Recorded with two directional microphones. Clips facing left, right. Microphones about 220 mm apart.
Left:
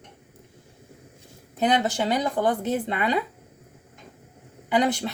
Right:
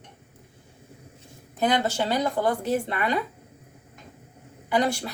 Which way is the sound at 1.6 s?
20° left (ahead or behind).